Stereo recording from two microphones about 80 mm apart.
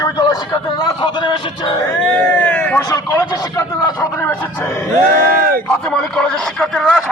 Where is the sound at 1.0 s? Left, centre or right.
Left.